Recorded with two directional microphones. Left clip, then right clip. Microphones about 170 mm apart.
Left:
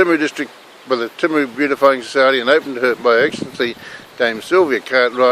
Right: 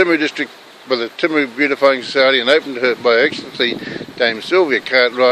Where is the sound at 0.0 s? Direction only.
5° left (ahead or behind).